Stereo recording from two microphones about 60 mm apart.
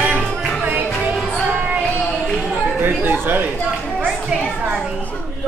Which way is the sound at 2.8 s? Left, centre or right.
Right.